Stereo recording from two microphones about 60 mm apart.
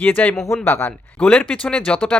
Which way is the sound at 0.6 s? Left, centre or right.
Left.